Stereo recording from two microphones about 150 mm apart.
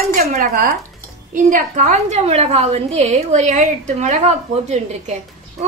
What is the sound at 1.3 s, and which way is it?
A woman's voice, 55° right (ahead or behind).